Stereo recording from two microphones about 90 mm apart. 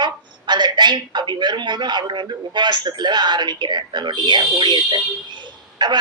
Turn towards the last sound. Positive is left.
turn(degrees=-55)  # may be behind; listen again after turning